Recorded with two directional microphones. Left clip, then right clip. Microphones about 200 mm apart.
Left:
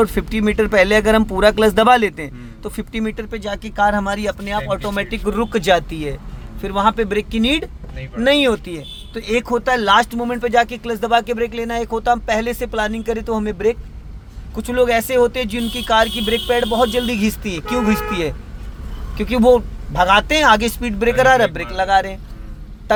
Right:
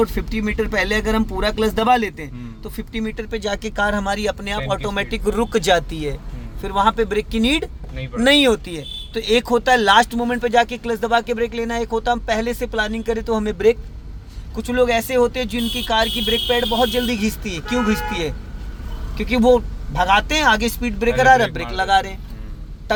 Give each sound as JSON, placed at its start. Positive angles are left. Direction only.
{"t": 0.0, "sound": "speech", "side_deg": 35}
{"t": 3.4, "sound": "speech", "side_deg": -10}
{"t": 14.5, "sound": "speech", "side_deg": 20}
{"t": 22.9, "sound": "quack", "side_deg": 20}